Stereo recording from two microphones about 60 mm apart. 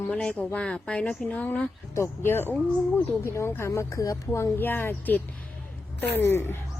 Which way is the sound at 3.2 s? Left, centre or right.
Left.